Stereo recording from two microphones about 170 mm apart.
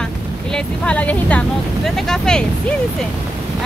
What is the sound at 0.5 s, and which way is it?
Speech, 5° left (ahead or behind).